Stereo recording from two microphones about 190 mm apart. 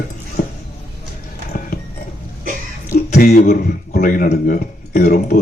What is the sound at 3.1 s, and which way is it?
Speech, 40° left (ahead or behind).